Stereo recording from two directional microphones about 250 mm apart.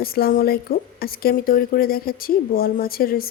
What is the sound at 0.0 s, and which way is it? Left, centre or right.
A woman's voice, left.